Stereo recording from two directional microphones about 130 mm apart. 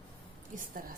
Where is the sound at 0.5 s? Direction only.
90° right.